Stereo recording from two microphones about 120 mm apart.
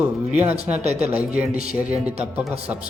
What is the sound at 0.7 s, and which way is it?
Speech, 65° right (ahead or behind).